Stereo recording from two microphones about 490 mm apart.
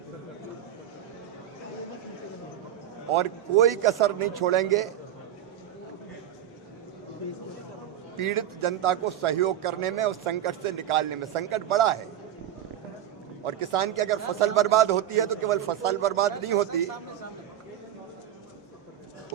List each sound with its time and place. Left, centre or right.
3.2 s a man's voice: right
8.1 s a man's voice: right
13.4 s a man's voice: right